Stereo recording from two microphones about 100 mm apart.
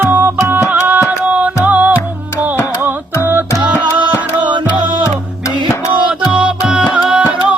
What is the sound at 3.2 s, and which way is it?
Music, 20° right (ahead or behind).